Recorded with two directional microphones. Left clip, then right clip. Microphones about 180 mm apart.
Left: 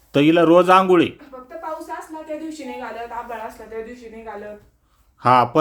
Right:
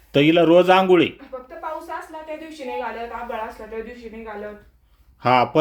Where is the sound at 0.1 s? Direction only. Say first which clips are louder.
Left 1 dB; centre (ahead or behind).